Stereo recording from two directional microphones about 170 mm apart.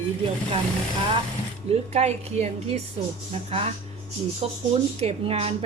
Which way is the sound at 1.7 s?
40° right (ahead or behind).